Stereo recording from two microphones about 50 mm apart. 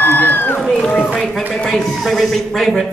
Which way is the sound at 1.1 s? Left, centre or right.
Centre.